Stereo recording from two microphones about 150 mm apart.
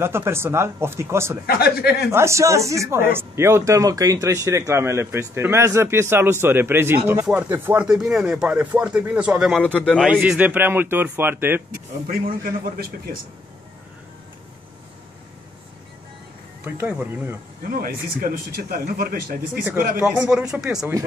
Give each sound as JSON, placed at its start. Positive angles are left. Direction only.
{"t": 0.0, "sound": "speech", "side_deg": -15}
{"t": 1.4, "sound": "speech", "side_deg": 90}
{"t": 2.0, "sound": "speech", "side_deg": -20}
{"t": 9.6, "sound": "speech", "side_deg": 10}
{"t": 12.1, "sound": "speech", "side_deg": -70}
{"t": 16.6, "sound": "speech", "side_deg": -15}
{"t": 17.8, "sound": "speech", "side_deg": -75}
{"t": 20.0, "sound": "speech", "side_deg": -5}